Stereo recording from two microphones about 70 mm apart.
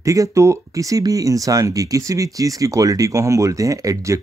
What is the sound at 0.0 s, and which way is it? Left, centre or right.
Speech, right.